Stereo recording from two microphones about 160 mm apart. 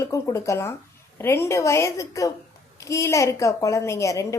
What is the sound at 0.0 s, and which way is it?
A woman's voice, 20° left (ahead or behind).